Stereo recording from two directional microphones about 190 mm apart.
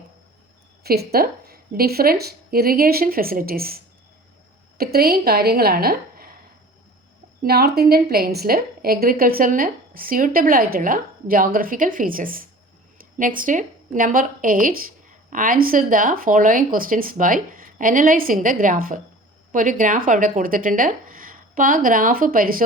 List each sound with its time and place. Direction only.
0.9 s speech: 55° right (ahead or behind)
4.8 s speech: 55° right (ahead or behind)
7.4 s a woman's voice: 55° right (ahead or behind)